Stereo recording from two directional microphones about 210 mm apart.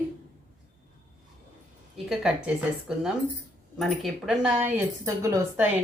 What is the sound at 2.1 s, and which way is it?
Speech, 5° right (ahead or behind).